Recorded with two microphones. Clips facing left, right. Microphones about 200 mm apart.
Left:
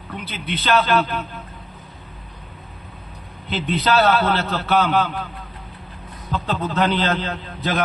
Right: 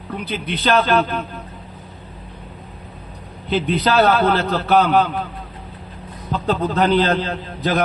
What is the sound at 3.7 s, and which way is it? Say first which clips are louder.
A man's voice: right 1 dB; 45° right (ahead or behind).